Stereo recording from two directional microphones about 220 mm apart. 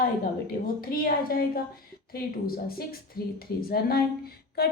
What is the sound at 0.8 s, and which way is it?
A woman's voice, 40° left (ahead or behind).